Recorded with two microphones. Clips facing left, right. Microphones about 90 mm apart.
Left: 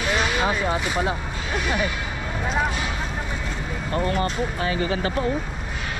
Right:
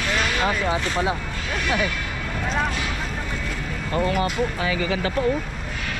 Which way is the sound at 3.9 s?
5° right (ahead or behind).